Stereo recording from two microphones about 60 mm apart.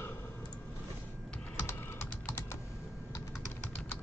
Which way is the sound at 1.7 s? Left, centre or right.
Left.